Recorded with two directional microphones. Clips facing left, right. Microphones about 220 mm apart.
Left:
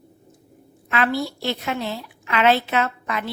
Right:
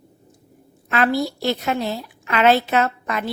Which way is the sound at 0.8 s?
40° right (ahead or behind).